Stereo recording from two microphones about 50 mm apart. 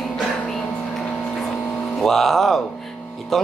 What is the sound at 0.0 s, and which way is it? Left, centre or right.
Music, centre.